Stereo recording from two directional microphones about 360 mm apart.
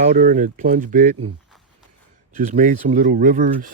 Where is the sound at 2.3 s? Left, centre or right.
Centre.